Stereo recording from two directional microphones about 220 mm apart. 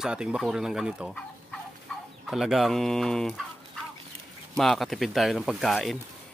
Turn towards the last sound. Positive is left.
turn(degrees=0)  # may be behind; listen again after turning